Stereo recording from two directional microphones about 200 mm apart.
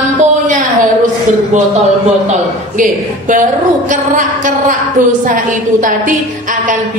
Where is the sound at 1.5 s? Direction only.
35° right (ahead or behind).